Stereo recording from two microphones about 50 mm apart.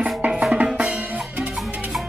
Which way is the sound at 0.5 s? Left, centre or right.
Right.